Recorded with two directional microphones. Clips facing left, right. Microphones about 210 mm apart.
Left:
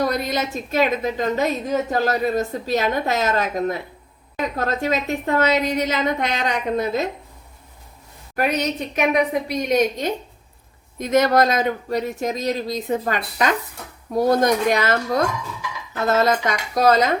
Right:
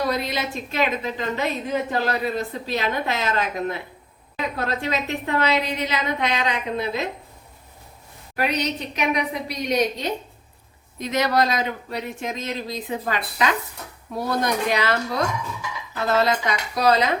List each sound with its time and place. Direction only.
0.1 s a woman's voice: 45° left (ahead or behind)
8.4 s a woman's voice: 50° left (ahead or behind)